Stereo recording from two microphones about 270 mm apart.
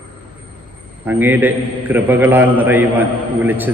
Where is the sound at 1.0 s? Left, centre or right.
Centre.